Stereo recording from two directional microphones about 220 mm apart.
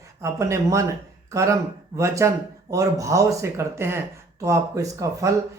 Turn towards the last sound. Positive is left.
turn(degrees=-15)  # may be behind; listen again after turning